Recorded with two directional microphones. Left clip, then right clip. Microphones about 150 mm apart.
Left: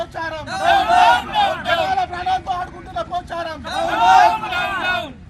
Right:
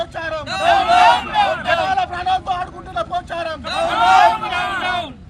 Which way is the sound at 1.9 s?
35° right (ahead or behind).